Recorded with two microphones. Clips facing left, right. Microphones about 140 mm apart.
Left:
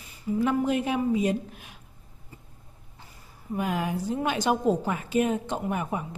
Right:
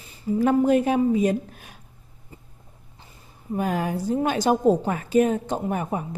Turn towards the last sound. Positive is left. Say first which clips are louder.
# right 3 dB
turn(degrees=-40)  # may be behind; listen again after turning